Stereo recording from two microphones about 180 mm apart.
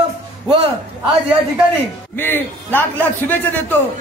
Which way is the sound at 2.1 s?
10° left (ahead or behind).